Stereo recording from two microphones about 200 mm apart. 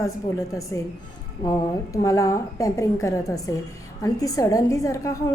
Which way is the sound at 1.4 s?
15° left (ahead or behind).